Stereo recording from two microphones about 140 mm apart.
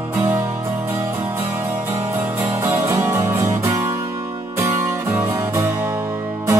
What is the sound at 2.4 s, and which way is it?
Music, 20° right (ahead or behind).